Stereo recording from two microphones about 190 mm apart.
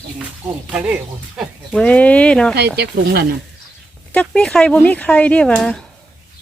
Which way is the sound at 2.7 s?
55° right (ahead or behind).